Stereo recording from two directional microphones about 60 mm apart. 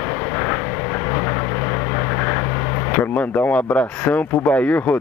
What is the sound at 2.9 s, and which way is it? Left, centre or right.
Speech, left.